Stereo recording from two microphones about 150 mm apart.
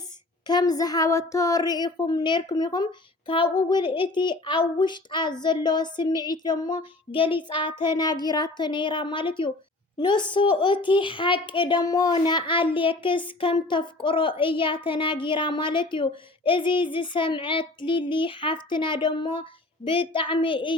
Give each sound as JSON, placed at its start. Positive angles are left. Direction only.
{"t": 0.4, "sound": "speech", "side_deg": 25}